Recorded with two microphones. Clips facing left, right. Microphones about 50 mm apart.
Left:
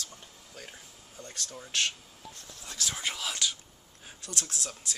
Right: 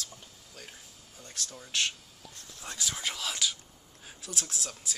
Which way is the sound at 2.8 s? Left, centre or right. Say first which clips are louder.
Left 1 dB; centre.